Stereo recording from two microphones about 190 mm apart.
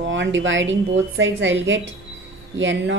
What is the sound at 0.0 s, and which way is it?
Speech, 80° right.